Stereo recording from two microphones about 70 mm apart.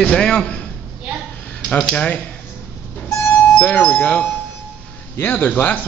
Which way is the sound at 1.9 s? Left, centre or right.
Left.